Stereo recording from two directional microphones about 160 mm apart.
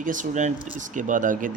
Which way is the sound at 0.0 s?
55° right (ahead or behind).